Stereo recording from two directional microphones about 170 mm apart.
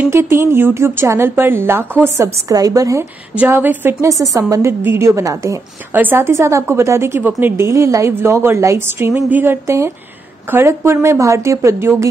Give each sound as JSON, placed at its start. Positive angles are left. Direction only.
{"t": 0.0, "sound": "a woman's voice", "side_deg": -15}